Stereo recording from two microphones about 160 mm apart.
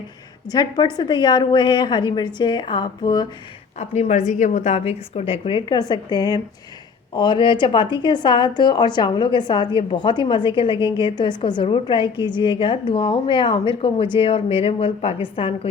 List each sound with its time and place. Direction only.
0.4 s a woman's voice: 25° left (ahead or behind)
3.8 s a woman's voice: 45° left (ahead or behind)